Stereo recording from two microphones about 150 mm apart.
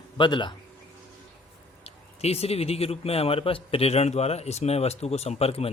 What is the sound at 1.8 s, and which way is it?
A man's voice, 45° left (ahead or behind).